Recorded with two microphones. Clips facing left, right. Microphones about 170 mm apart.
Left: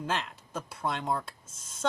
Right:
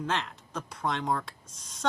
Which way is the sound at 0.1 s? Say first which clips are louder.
Right 1 dB; 5° left (ahead or behind).